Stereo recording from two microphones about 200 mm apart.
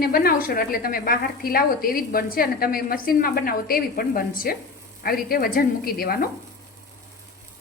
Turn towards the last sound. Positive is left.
turn(degrees=50)  # may be behind; listen again after turning